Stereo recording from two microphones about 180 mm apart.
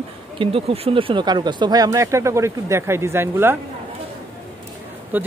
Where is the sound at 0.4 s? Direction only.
30° right (ahead or behind); by 3.5 s 15° right (ahead or behind).